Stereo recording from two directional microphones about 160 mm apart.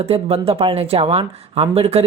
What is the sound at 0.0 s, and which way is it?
Speech, 40° right (ahead or behind).